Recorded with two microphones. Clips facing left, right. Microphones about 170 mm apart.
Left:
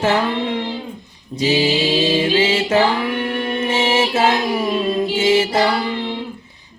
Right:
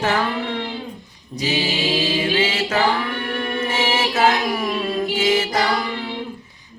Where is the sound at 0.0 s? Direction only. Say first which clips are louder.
Left 3 dB; 25° left (ahead or behind).